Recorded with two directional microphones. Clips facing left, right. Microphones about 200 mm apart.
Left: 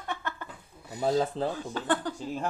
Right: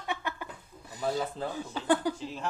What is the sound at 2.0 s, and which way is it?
Speech, 10° right (ahead or behind).